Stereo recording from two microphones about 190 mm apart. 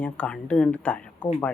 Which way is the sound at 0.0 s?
5° left (ahead or behind).